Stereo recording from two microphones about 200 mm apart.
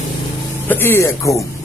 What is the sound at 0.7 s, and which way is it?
Speech, 10° left (ahead or behind).